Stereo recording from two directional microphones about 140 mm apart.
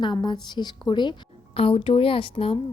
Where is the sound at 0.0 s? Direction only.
35° left (ahead or behind).